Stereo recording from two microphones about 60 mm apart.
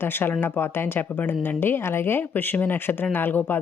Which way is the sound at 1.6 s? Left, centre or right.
Left.